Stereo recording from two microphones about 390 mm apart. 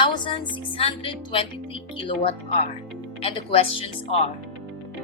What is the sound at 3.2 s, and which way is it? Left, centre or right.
Speech, centre.